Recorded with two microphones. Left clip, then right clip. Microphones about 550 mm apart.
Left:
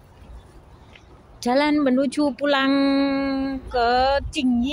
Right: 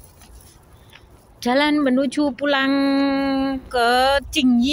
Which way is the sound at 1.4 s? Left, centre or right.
Right.